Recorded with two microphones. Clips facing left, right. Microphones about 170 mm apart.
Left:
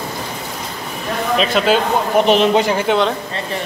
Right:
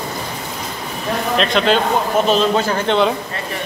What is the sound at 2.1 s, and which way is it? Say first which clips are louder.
Speech: left 4 dB; 20° left (ahead or behind).